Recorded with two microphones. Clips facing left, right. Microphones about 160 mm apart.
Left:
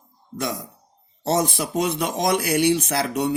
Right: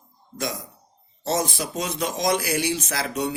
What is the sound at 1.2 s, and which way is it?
Speech, 65° left (ahead or behind).